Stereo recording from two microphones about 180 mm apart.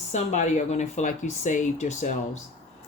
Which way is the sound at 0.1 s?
40° left (ahead or behind).